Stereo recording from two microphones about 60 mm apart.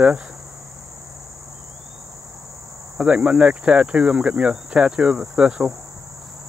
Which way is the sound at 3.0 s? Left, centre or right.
Centre.